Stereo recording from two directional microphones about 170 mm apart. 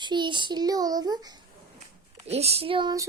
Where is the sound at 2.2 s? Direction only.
40° right (ahead or behind).